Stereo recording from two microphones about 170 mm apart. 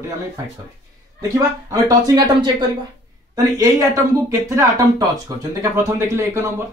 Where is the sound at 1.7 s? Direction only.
20° right (ahead or behind).